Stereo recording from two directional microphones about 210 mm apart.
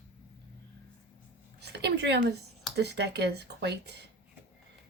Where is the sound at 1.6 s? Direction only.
55° right (ahead or behind).